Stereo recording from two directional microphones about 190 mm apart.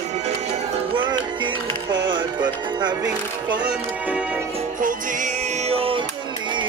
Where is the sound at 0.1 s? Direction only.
35° right (ahead or behind).